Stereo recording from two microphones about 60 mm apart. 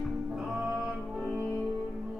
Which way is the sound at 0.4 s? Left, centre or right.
Centre.